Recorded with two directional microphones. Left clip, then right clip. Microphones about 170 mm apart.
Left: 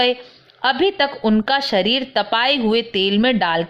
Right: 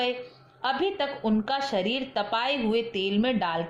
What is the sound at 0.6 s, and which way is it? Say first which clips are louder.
A woman's voice: left 10 dB; 40° left (ahead or behind).